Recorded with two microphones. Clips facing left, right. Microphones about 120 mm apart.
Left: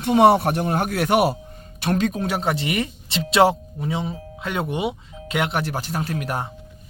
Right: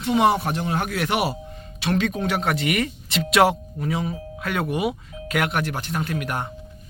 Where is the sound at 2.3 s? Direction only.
30° left (ahead or behind).